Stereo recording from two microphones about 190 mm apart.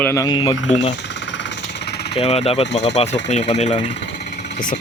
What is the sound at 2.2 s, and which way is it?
Speech, 35° left (ahead or behind).